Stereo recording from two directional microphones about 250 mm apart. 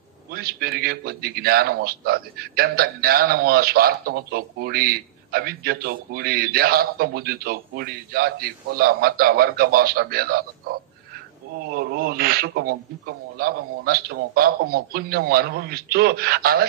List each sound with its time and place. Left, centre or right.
0.3 s a man's voice: right